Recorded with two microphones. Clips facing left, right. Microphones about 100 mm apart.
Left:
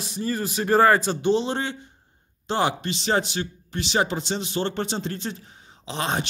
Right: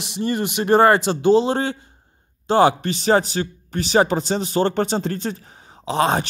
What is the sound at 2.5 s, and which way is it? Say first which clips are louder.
A man's voice: right 8 dB; 50° right (ahead or behind).